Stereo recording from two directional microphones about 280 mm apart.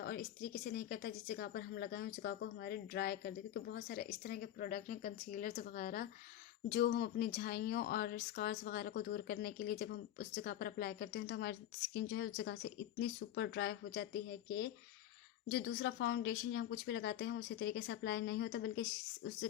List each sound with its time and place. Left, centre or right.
0.0 s speech: left